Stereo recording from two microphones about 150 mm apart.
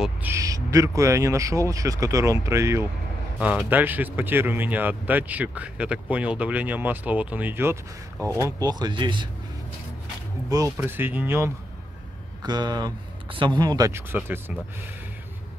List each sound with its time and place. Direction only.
0.0 s speech: 10° right (ahead or behind)
0.4 s speech: 20° right (ahead or behind)
10.5 s speech: 15° right (ahead or behind)
12.4 s speech: 30° right (ahead or behind)
14.1 s speech: 10° right (ahead or behind)